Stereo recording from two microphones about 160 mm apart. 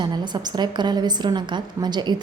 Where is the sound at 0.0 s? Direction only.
25° right (ahead or behind).